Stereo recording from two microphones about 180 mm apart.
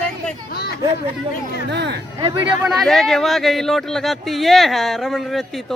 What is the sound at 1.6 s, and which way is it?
Speech, 70° right (ahead or behind).